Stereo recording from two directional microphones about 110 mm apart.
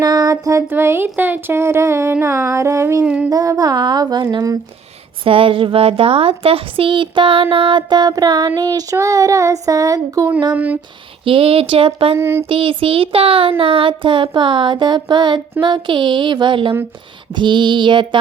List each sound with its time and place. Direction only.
0.0 s a sound: 35° right (ahead or behind)
0.7 s speech: 20° right (ahead or behind)
3.0 s child singing: 10° right (ahead or behind)
3.2 s child singing: 30° right (ahead or behind)
5.2 s child singing: 55° right (ahead or behind); by 10.2 s 35° right (ahead or behind)
10.5 s child singing: 15° right (ahead or behind)
11.3 s speech: 55° right (ahead or behind)
12.1 s speech: 25° right (ahead or behind)
12.5 s child singing: 55° right (ahead or behind)